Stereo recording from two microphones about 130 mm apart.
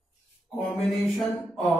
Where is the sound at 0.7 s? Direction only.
Centre (ahead or behind).